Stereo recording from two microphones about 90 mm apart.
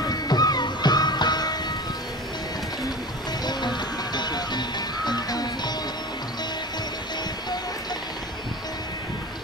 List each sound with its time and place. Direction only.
0.0 s music: 45° left (ahead or behind)
3.4 s music: 55° left (ahead or behind)